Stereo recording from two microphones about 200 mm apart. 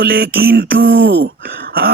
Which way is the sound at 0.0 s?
50° right (ahead or behind).